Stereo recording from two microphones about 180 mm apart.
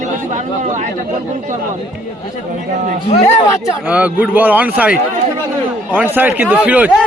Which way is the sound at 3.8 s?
10° right (ahead or behind).